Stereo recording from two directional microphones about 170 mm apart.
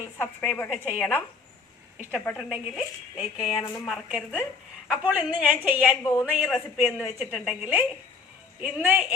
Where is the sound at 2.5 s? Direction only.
5° right (ahead or behind).